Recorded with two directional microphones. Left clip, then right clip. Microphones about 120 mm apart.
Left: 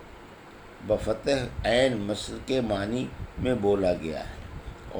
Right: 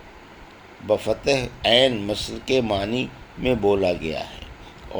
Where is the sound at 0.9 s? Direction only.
40° right (ahead or behind).